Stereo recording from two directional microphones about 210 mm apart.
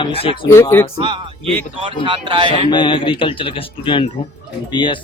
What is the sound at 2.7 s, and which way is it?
Speech, 20° left (ahead or behind).